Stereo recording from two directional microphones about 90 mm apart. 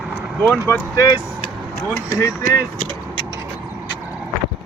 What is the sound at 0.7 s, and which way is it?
Speech, 30° left (ahead or behind).